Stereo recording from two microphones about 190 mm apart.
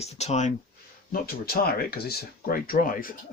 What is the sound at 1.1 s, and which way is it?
Speech, 50° left (ahead or behind).